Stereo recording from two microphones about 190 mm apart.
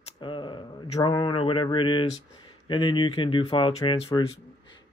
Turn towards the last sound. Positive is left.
turn(degrees=30)  # may be behind; listen again after turning